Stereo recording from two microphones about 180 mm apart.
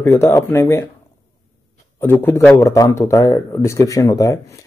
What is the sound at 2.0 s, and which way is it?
A man's voice, 10° left (ahead or behind).